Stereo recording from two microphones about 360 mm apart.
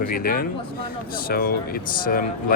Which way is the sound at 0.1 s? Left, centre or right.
Left.